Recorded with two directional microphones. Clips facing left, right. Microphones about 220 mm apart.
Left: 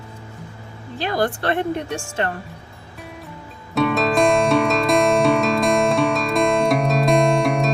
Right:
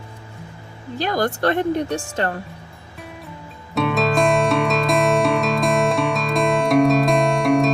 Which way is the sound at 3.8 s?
Centre (ahead or behind).